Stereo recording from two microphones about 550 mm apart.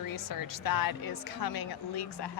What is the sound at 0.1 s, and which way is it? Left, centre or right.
A woman's voice, left.